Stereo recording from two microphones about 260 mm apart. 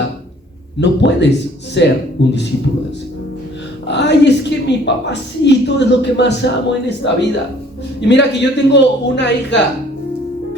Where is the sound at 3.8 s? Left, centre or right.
Left.